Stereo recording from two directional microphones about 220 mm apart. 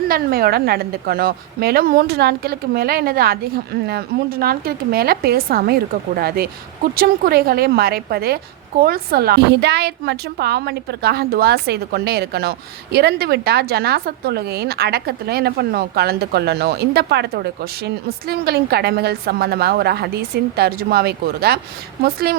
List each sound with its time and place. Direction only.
0.1 s speech: 45° right (ahead or behind)